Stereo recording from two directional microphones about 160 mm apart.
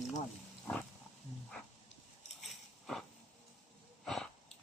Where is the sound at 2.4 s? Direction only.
Centre (ahead or behind).